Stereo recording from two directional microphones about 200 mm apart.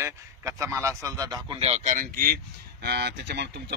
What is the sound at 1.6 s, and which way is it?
Speech, 35° right (ahead or behind).